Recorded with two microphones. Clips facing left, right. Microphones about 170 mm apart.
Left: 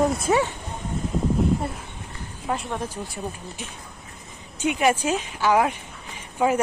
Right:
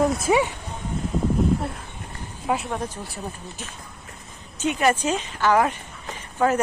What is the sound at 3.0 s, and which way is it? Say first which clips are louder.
A woman's voice: left 1 dB; 10° left (ahead or behind).